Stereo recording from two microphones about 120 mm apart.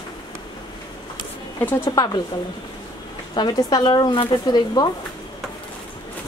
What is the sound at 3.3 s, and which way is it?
Speech, 35° left (ahead or behind).